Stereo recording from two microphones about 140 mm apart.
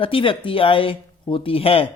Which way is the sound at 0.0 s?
40° left (ahead or behind).